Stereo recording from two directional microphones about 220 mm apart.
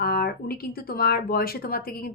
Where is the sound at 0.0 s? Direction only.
45° left (ahead or behind).